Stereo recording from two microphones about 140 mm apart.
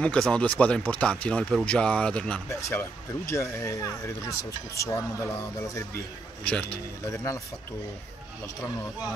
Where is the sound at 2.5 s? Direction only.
20° left (ahead or behind).